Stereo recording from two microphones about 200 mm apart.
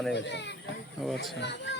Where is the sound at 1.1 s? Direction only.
60° left (ahead or behind).